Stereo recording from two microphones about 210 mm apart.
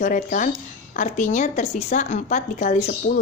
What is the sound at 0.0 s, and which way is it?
Speech, 40° left (ahead or behind).